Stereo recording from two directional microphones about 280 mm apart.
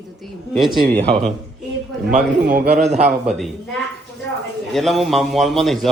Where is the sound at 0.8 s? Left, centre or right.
Right.